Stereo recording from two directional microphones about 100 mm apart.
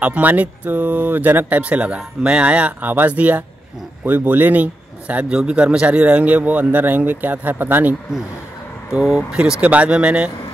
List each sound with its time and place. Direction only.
0.0 s a man's voice: 15° right (ahead or behind)
8.9 s a man's voice: 5° right (ahead or behind)